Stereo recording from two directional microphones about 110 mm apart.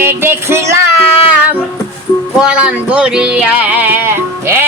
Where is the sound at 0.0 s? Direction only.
20° right (ahead or behind).